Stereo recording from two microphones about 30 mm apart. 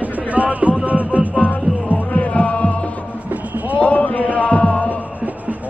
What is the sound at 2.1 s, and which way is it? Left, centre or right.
Music, left.